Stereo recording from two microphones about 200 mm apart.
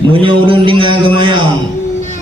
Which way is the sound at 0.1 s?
25° right (ahead or behind).